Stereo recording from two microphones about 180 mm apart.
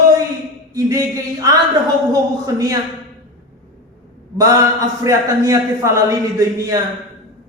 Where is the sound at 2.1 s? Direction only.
20° right (ahead or behind).